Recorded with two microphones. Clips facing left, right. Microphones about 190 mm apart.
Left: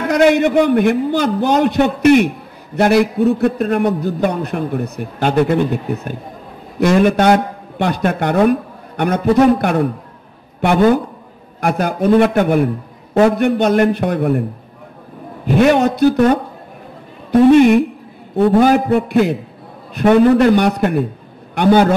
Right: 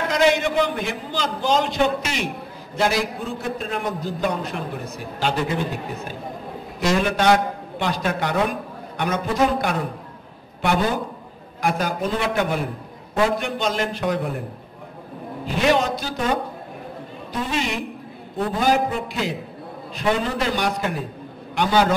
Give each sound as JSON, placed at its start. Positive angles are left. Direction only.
{"t": 0.1, "sound": "a man's voice", "side_deg": 60}
{"t": 15.4, "sound": "a man's voice", "side_deg": 55}